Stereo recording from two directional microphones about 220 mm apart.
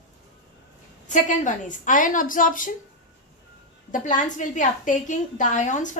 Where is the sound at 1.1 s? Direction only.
35° left (ahead or behind).